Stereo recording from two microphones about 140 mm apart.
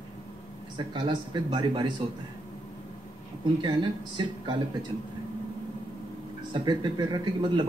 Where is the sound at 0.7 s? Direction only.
35° right (ahead or behind).